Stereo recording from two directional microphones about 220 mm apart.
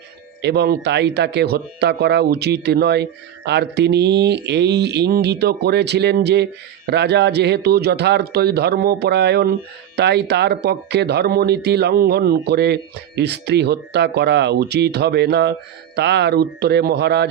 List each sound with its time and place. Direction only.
0.4 s speech: 50° right (ahead or behind)